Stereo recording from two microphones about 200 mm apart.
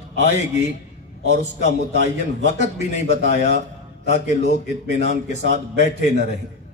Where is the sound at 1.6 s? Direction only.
35° left (ahead or behind).